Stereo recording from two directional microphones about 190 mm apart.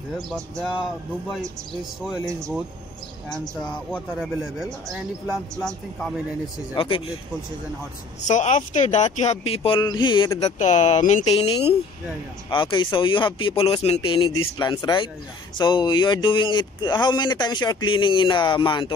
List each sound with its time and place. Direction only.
0.3 s speech: 5° right (ahead or behind)
3.9 s speech: centre (ahead or behind)
6.7 s speech: 25° left (ahead or behind)
8.3 s speech: 40° left (ahead or behind); by 10.5 s 20° left (ahead or behind)
10.6 s speech: 35° left (ahead or behind)